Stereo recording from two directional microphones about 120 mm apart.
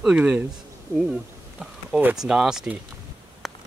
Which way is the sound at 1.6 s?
10° right (ahead or behind).